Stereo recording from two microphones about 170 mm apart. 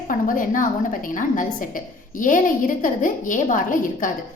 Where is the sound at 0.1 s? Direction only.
50° left (ahead or behind).